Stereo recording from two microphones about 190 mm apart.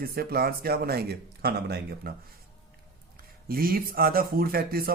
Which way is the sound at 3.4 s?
50° right (ahead or behind).